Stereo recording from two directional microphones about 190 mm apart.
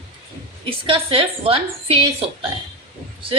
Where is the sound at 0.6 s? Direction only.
25° right (ahead or behind).